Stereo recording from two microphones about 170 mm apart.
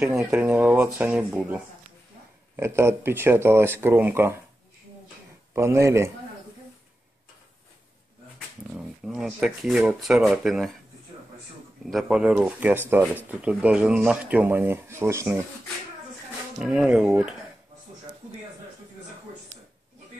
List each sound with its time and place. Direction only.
0.2 s speech: 10° right (ahead or behind)
5.5 s speech: 15° right (ahead or behind)
8.7 s speech: 5° right (ahead or behind)
11.8 s speech: centre (ahead or behind)
16.5 s speech: 5° right (ahead or behind)